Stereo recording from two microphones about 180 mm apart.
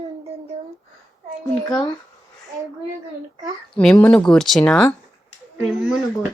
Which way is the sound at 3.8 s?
5° left (ahead or behind).